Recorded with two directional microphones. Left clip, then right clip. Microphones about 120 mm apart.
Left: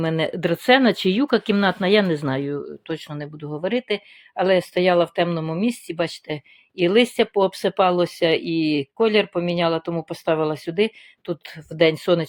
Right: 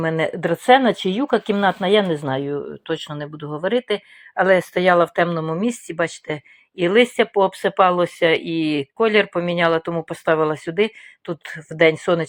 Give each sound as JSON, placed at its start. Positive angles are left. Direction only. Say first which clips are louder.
{"t": 0.0, "sound": "speech", "louder": "right 2 dB", "side_deg": 40}
{"t": 2.8, "sound": "speech", "louder": "right 4 dB", "side_deg": 15}
{"t": 11.8, "sound": "speech", "louder": "right 2 dB", "side_deg": 35}